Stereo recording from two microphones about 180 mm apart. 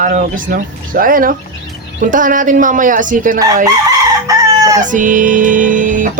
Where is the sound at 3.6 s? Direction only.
20° right (ahead or behind).